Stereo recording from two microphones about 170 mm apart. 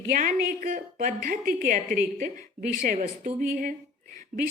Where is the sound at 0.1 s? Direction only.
55° right (ahead or behind).